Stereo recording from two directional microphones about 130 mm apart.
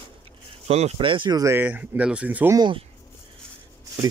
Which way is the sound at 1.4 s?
20° right (ahead or behind).